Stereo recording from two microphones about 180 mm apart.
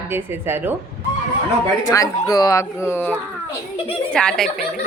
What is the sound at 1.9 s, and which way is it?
Speech, 20° left (ahead or behind).